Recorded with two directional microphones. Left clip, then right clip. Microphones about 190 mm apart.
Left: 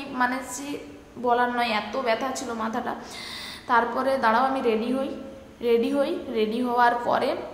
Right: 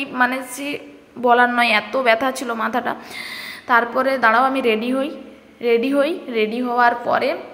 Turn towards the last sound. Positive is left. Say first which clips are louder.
# right 5 dB
turn(degrees=-15)  # may be behind; listen again after turning